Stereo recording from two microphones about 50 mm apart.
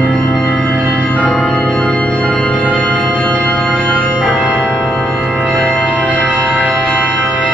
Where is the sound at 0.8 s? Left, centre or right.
Centre.